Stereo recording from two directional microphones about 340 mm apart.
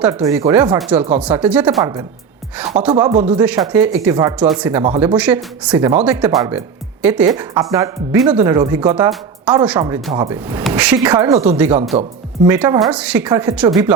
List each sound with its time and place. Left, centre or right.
0.0 s speech: centre
3.0 s speech: centre
3.3 s speech: centre